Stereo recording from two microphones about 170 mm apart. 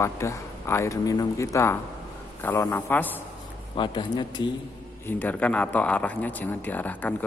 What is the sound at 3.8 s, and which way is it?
Speech, 25° left (ahead or behind).